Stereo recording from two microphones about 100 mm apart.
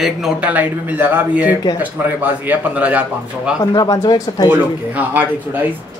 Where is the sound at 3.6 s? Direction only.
35° left (ahead or behind).